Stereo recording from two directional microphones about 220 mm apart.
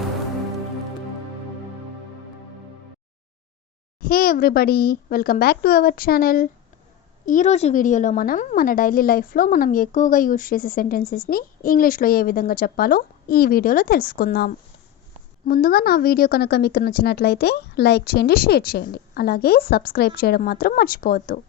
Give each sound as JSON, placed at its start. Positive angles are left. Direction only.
{"t": 4.0, "sound": "a woman's voice", "side_deg": 40}